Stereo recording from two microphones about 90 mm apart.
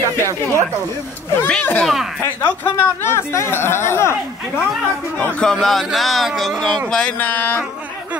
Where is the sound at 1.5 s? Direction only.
15° left (ahead or behind).